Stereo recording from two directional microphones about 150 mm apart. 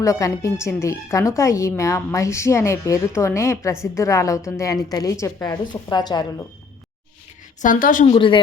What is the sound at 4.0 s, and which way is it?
A woman's voice, 20° left (ahead or behind).